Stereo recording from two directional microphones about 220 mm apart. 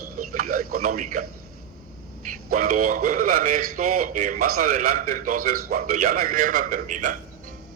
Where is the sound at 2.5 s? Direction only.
40° right (ahead or behind).